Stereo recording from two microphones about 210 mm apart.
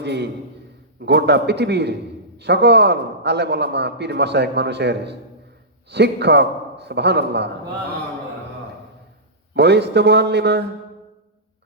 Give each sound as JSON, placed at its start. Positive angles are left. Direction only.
{"t": 0.0, "sound": "a man's voice", "side_deg": -55}
{"t": 9.6, "sound": "a man's voice", "side_deg": -55}